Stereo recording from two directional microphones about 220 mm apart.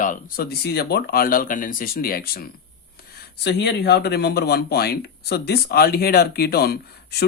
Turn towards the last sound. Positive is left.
turn(degrees=45)  # may be behind; listen again after turning